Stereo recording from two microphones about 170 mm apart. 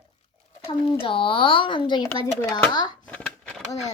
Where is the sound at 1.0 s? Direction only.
30° left (ahead or behind).